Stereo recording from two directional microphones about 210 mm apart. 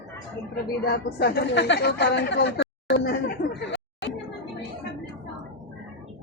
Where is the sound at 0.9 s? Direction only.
50° left (ahead or behind).